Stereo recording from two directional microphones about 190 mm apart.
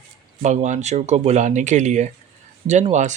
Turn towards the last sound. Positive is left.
turn(degrees=-40)  # may be behind; listen again after turning